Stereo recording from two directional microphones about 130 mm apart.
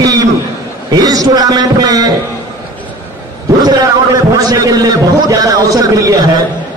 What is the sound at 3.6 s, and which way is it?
A man's voice, 30° right (ahead or behind).